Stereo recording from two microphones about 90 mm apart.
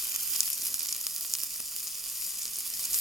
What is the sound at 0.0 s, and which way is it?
Sizzle, centre (ahead or behind).